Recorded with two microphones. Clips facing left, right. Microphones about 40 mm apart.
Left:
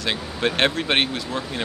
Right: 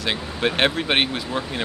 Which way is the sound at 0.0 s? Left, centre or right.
Centre.